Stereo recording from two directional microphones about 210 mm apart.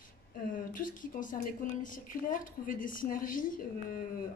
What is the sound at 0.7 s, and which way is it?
Speech, 40° left (ahead or behind).